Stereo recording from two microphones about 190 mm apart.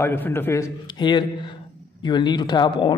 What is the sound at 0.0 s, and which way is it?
A man's voice, 10° left (ahead or behind).